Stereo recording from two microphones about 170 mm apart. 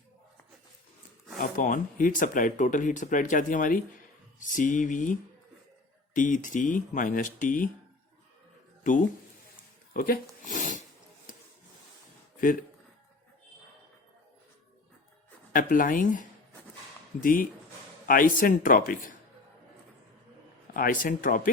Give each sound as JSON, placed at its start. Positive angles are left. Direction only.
{"t": 1.5, "sound": "speech", "side_deg": 50}
{"t": 6.1, "sound": "speech", "side_deg": 50}
{"t": 9.9, "sound": "a sound", "side_deg": 55}
{"t": 15.5, "sound": "speech", "side_deg": 55}
{"t": 20.7, "sound": "speech", "side_deg": 55}